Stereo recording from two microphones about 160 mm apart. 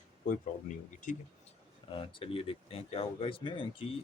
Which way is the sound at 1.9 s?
35° left (ahead or behind).